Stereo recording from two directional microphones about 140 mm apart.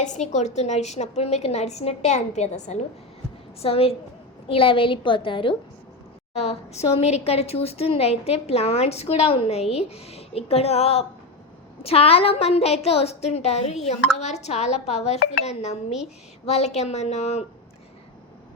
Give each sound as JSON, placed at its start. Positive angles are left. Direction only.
{"t": 0.0, "sound": "a woman's voice", "side_deg": 60}
{"t": 3.6, "sound": "a woman's voice", "side_deg": 45}
{"t": 6.3, "sound": "a woman's voice", "side_deg": 50}